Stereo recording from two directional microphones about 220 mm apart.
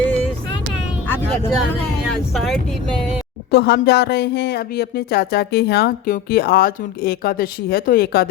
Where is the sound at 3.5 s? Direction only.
50° left (ahead or behind).